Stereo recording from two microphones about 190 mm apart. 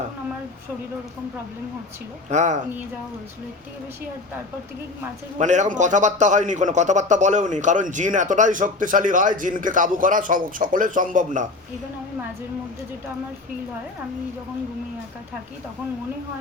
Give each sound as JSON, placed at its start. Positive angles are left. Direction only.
{"t": 2.3, "sound": "a man's voice", "side_deg": -40}
{"t": 5.4, "sound": "a man's voice", "side_deg": -40}